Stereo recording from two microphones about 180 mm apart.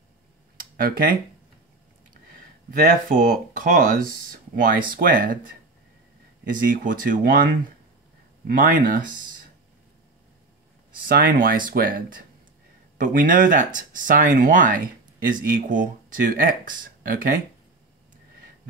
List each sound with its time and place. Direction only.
0.6 s a sound: 55° right (ahead or behind)
2.7 s speech: 45° right (ahead or behind)
6.5 s speech: 50° right (ahead or behind)
8.5 s speech: 50° right (ahead or behind)
11.1 s speech: 50° right (ahead or behind)